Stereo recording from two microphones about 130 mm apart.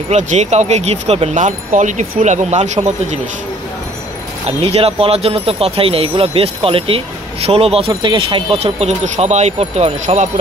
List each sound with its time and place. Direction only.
0.1 s speech: 65° right (ahead or behind)
4.5 s speech: 50° right (ahead or behind)